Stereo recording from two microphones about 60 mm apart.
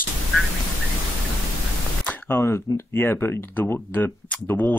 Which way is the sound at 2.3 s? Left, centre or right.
Left.